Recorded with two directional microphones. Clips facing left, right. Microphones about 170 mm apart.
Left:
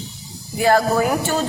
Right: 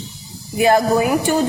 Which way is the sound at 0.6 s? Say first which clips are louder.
Right 2 dB; 20° right (ahead or behind).